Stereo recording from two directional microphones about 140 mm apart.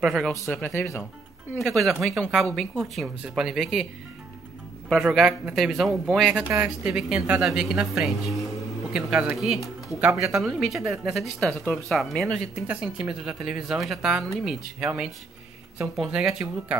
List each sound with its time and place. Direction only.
0.0 s a woman's voice: centre (ahead or behind)
0.5 s speech: 15° left (ahead or behind)
1.6 s a woman's voice: centre (ahead or behind)
4.8 s a woman's voice: centre (ahead or behind)